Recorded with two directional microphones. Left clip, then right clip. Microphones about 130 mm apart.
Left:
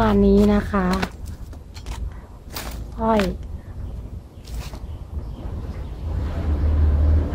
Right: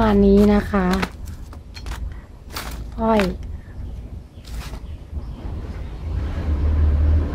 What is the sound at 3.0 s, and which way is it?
Speech, 50° right (ahead or behind).